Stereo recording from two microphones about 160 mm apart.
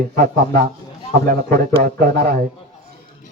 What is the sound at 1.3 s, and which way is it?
A man's voice, 70° right (ahead or behind).